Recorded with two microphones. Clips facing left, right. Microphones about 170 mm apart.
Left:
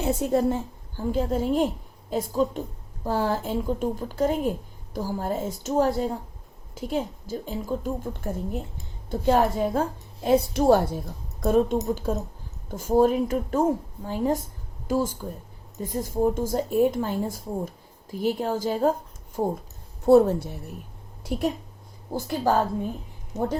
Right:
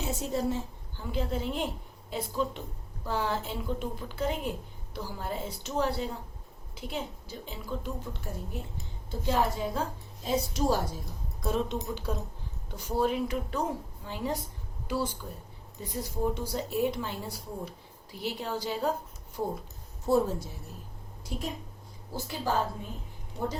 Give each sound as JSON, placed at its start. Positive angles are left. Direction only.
{"t": 0.0, "sound": "a woman's voice", "side_deg": 55}
{"t": 20.1, "sound": "a woman's voice", "side_deg": 65}
{"t": 22.1, "sound": "speech", "side_deg": 50}